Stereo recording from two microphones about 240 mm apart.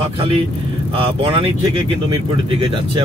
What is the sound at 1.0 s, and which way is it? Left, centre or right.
Speech, right.